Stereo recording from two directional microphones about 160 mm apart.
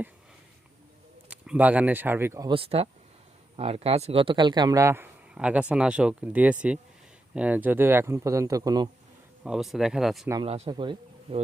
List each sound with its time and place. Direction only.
1.3 s speech: 10° right (ahead or behind)
2.5 s speech: 35° right (ahead or behind); by 5.0 s 15° right (ahead or behind)
5.3 s speech: 5° right (ahead or behind); by 8.9 s 25° right (ahead or behind)
9.4 s speech: 5° right (ahead or behind)
10.4 s speech: 40° right (ahead or behind)